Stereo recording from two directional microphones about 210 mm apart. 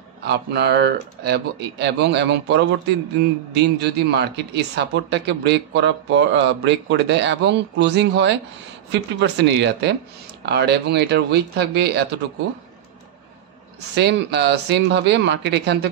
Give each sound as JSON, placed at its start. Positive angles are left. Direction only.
{"t": 0.2, "sound": "speech", "side_deg": -50}
{"t": 13.9, "sound": "speech", "side_deg": -55}